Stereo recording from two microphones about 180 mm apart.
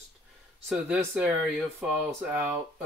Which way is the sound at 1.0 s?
5° right (ahead or behind).